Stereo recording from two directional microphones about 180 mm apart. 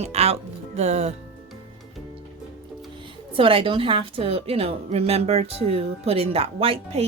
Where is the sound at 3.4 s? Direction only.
30° right (ahead or behind).